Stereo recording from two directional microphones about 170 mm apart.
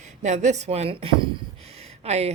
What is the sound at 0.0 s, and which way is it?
A woman's voice, 45° right (ahead or behind).